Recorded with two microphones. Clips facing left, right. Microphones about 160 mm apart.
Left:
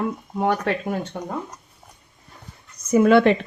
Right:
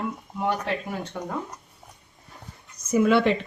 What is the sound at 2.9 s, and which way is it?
Speech, 65° left (ahead or behind).